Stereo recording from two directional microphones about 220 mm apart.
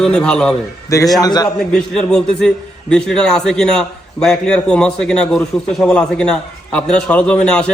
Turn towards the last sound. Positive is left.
turn(degrees=5)  # may be behind; listen again after turning